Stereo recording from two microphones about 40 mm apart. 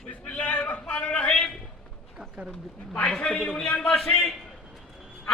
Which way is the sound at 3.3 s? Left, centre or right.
Centre.